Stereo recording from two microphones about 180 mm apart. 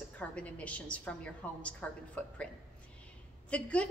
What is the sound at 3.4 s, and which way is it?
Speech, 5° left (ahead or behind).